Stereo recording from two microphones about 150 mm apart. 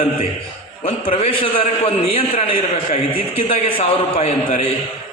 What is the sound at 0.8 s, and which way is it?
A man's voice, 40° left (ahead or behind).